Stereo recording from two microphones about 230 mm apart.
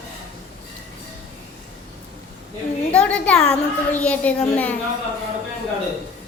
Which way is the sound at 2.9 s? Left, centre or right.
Centre.